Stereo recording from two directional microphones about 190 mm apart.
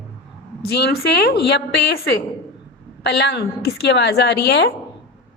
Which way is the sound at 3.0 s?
60° left (ahead or behind).